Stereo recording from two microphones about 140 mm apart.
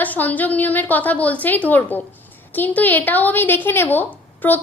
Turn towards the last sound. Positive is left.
turn(degrees=15)  # may be behind; listen again after turning